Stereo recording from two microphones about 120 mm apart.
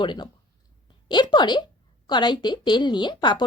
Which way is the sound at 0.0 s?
40° left (ahead or behind).